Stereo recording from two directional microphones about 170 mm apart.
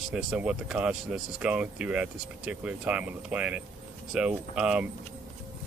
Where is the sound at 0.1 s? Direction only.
5° right (ahead or behind).